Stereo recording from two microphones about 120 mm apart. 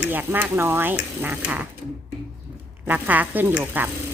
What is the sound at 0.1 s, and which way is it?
Speech, 15° right (ahead or behind).